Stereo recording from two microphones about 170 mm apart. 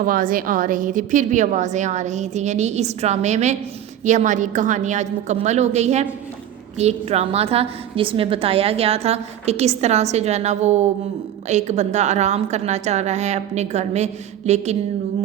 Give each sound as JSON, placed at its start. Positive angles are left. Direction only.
{"t": 0.0, "sound": "a woman's voice", "side_deg": -55}